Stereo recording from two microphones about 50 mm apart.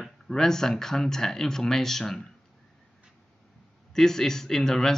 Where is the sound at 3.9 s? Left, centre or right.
Centre.